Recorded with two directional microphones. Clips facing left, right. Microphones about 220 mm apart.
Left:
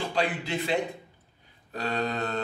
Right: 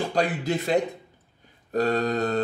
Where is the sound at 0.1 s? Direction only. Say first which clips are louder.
Right 4 dB; 45° right (ahead or behind).